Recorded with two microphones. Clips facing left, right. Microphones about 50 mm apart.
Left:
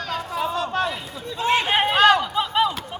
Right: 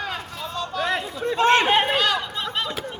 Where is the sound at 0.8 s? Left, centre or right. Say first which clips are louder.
Right 4 dB; right.